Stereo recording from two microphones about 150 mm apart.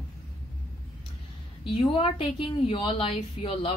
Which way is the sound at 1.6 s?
35° left (ahead or behind).